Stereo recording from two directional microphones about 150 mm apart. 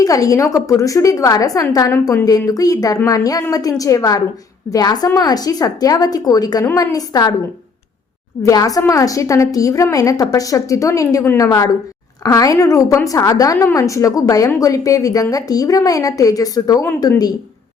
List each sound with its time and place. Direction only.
0.0 s a woman's voice: 25° left (ahead or behind)
8.4 s a woman's voice: 20° left (ahead or behind)